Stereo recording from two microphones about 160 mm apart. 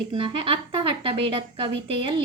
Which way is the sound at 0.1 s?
35° right (ahead or behind).